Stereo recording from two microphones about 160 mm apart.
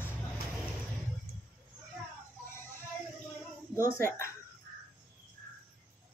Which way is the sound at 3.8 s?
60° right (ahead or behind).